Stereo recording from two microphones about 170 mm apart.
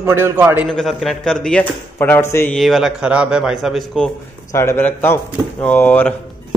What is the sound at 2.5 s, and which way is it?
Speech, centre (ahead or behind).